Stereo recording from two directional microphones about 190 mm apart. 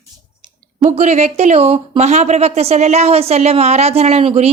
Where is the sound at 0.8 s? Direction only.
35° right (ahead or behind).